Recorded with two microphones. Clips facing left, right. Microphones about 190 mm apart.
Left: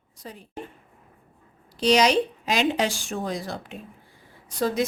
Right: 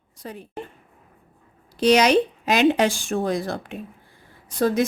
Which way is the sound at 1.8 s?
55° right (ahead or behind).